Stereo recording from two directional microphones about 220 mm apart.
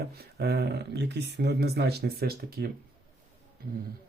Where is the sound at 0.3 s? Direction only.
45° right (ahead or behind).